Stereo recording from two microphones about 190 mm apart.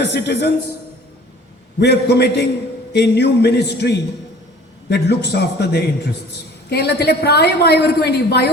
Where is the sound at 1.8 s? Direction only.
60° left (ahead or behind).